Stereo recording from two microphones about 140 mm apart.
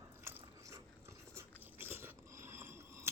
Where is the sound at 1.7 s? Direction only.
15° right (ahead or behind).